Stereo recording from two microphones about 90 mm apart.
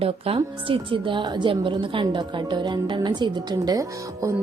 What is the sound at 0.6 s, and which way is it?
A woman's voice, 75° right (ahead or behind).